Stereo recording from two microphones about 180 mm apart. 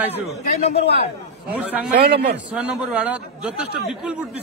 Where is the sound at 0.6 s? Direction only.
35° left (ahead or behind).